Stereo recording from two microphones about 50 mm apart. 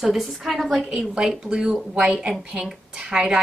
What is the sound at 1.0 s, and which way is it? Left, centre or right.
A woman's voice, centre.